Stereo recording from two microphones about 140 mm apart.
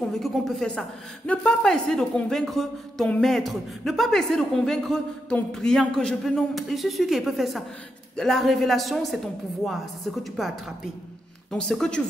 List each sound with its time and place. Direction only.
0.1 s a woman's voice: centre (ahead or behind)